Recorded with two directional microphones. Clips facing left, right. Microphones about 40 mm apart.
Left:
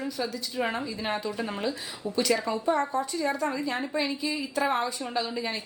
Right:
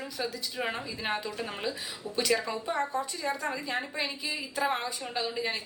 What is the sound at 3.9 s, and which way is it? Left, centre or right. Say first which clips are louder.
A woman's voice: left 5 dB; centre.